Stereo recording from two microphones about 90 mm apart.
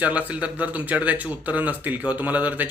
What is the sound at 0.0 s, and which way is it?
Speech, 15° right (ahead or behind).